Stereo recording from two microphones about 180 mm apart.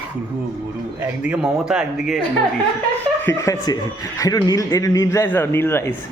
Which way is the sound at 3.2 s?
15° left (ahead or behind).